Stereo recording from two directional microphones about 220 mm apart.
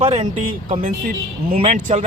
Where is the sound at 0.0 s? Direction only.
25° right (ahead or behind).